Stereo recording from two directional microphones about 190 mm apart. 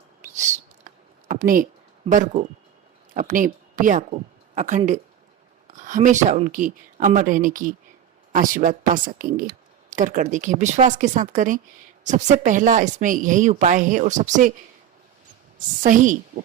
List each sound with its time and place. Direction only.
0.2 s a sound: 40° right (ahead or behind)
2.0 s speech: 40° right (ahead or behind)
15.5 s speech: 45° right (ahead or behind)